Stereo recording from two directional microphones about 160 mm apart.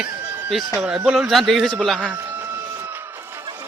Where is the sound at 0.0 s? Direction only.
5° right (ahead or behind).